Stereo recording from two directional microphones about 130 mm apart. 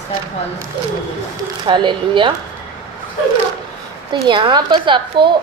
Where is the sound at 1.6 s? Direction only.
40° right (ahead or behind).